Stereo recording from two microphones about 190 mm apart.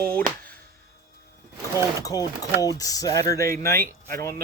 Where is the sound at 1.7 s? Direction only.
20° left (ahead or behind).